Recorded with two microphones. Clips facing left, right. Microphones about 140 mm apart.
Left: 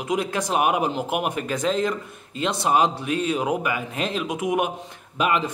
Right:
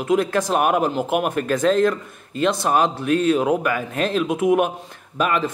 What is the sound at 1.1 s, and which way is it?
Speech, 50° right (ahead or behind).